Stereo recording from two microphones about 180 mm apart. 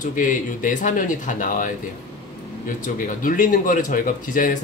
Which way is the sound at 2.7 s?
45° left (ahead or behind).